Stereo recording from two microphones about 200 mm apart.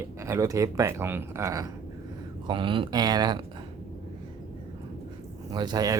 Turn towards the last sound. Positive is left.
turn(degrees=-20)  # may be behind; listen again after turning